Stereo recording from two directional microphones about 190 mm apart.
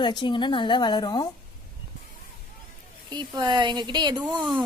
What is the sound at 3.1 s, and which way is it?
Speech, 25° right (ahead or behind).